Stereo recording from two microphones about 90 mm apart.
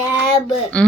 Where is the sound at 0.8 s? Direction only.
15° left (ahead or behind).